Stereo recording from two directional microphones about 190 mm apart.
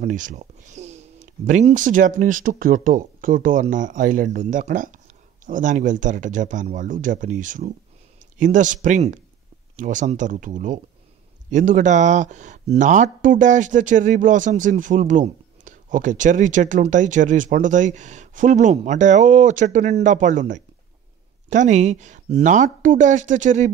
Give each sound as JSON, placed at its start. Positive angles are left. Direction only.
{"t": 0.0, "sound": "speech", "side_deg": -40}